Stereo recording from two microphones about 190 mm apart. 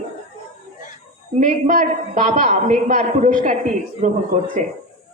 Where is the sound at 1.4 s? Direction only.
40° right (ahead or behind).